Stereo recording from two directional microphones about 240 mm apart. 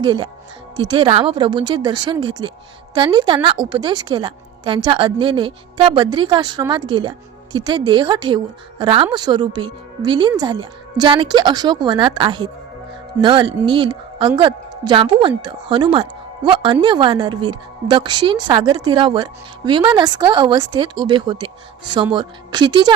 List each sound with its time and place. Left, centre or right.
0.0 s a woman's voice: centre